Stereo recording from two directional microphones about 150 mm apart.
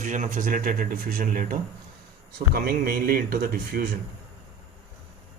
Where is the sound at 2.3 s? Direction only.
85° right.